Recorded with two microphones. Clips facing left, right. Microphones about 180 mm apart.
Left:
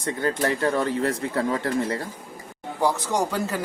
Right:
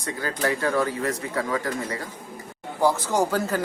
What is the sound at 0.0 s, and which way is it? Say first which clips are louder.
Speech: left 3 dB; 25° left (ahead or behind).